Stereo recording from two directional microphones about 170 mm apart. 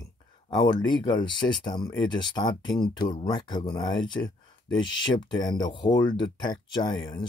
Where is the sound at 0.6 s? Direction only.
25° left (ahead or behind).